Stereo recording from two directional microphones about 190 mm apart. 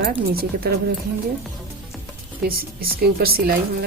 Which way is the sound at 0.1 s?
50° right (ahead or behind).